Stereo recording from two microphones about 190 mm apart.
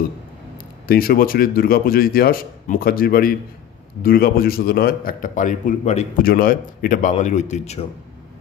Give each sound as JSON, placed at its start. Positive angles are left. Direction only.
{"t": 0.8, "sound": "a man's voice", "side_deg": 50}